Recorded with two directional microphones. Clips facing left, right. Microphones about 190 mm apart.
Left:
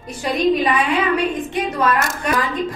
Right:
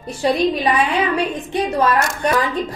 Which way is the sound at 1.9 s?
Centre (ahead or behind).